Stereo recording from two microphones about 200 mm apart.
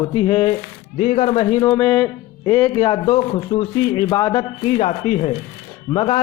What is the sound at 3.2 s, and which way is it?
A man's voice, 30° left (ahead or behind).